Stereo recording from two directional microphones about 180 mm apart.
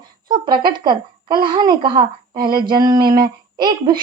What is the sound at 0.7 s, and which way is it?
A woman's voice, 25° right (ahead or behind).